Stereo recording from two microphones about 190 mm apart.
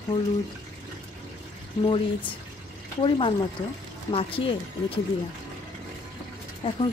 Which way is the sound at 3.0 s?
30° left (ahead or behind).